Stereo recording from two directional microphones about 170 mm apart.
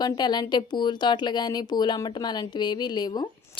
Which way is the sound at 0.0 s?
25° left (ahead or behind).